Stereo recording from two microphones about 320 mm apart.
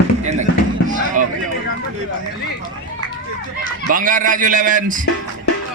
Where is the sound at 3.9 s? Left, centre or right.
Right.